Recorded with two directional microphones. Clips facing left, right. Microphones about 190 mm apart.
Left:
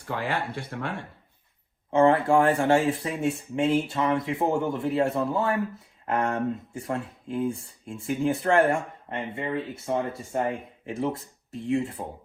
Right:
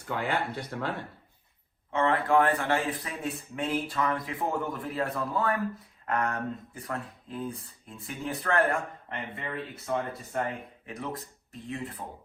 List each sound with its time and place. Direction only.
0.6 s speech: 25° left (ahead or behind)